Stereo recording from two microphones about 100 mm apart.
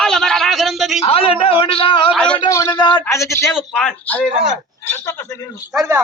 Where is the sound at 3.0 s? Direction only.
30° left (ahead or behind).